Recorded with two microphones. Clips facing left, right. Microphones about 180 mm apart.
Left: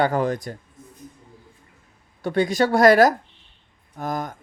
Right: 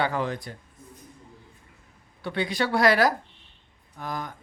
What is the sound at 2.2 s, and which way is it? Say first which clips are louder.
Speech: left 7 dB; 45° left (ahead or behind).